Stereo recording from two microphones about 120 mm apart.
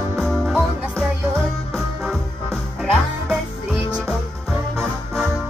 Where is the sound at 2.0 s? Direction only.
Centre (ahead or behind).